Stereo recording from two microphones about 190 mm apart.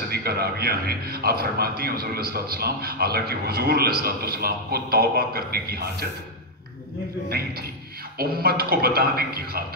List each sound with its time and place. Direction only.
0.1 s a man's voice: 55° right (ahead or behind)
8.2 s a man's voice: 50° right (ahead or behind)